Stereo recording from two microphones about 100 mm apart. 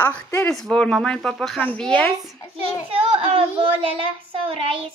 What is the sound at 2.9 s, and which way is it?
Speech, 70° right (ahead or behind).